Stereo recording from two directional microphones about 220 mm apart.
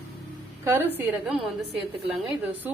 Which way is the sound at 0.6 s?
15° right (ahead or behind).